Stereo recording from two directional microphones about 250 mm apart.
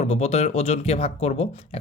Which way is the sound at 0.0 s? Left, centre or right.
Left.